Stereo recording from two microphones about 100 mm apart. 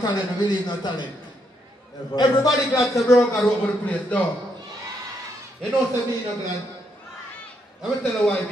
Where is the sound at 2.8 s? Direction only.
Centre (ahead or behind).